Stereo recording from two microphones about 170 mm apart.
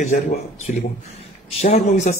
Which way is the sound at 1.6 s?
45° left (ahead or behind).